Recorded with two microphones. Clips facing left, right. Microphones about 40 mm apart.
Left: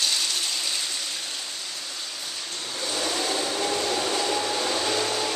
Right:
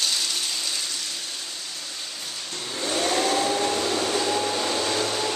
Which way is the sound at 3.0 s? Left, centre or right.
Right.